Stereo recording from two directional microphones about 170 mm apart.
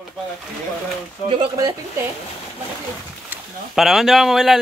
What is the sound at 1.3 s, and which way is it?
Speech, 25° right (ahead or behind).